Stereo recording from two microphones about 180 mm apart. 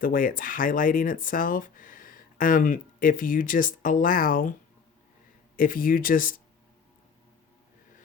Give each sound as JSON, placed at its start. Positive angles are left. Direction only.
{"t": 0.0, "sound": "speech", "side_deg": 50}
{"t": 5.5, "sound": "speech", "side_deg": 50}